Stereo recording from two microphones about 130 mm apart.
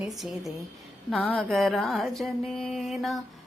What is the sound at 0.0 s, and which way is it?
A woman's voice, centre (ahead or behind).